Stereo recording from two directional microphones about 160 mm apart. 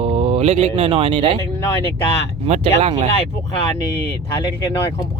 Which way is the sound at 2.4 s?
40° right (ahead or behind).